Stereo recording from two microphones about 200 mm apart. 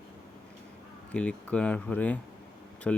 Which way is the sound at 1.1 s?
5° left (ahead or behind).